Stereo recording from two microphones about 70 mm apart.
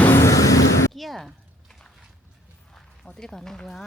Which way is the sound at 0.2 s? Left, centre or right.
Left.